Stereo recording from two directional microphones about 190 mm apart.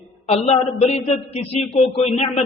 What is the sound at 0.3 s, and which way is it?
A man's voice, 35° left (ahead or behind).